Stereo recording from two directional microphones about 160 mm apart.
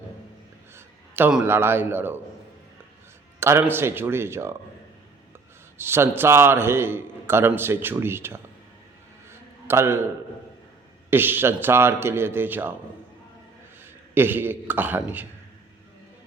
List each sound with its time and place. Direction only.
1.1 s a man's voice: 10° right (ahead or behind)
3.4 s a man's voice: 15° right (ahead or behind)
5.7 s a man's voice: 15° right (ahead or behind)
9.3 s a sound: 15° right (ahead or behind)
11.1 s a man's voice: 15° right (ahead or behind)
14.1 s a man's voice: 10° right (ahead or behind)